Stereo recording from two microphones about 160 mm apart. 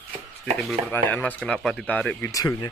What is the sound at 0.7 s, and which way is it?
Speech, 10° left (ahead or behind).